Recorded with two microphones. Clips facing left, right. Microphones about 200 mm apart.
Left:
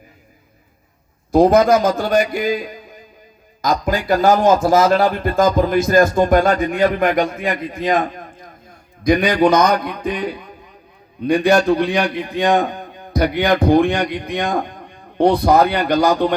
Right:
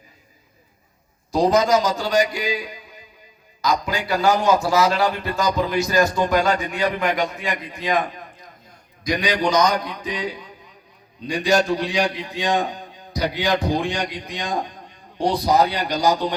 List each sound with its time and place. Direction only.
1.3 s a man's voice: 55° left (ahead or behind)